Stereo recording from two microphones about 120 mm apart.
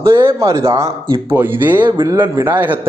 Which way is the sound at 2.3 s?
20° right (ahead or behind).